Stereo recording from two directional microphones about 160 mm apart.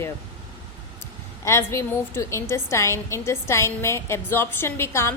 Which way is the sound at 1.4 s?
15° left (ahead or behind).